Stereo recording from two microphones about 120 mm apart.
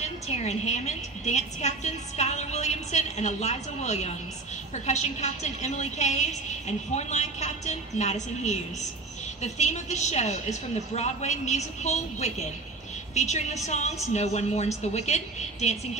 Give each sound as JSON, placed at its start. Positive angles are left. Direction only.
{"t": 0.3, "sound": "a woman's voice", "side_deg": 65}